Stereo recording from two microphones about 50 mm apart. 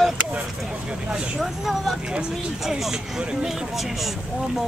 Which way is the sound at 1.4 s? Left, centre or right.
Centre.